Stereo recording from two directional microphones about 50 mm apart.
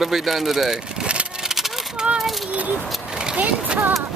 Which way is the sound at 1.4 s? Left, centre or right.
Centre.